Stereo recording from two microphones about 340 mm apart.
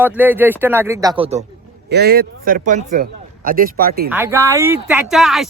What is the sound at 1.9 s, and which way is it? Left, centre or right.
A man's voice, right.